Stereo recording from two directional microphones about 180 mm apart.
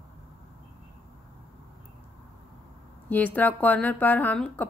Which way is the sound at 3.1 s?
10° left (ahead or behind).